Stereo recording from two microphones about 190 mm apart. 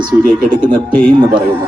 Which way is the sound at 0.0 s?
50° right (ahead or behind).